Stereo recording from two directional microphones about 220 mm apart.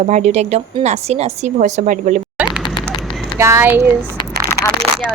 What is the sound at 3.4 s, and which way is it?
Speech, 10° right (ahead or behind).